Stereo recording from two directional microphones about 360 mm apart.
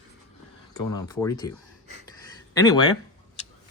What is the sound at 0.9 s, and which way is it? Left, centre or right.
Speech, centre.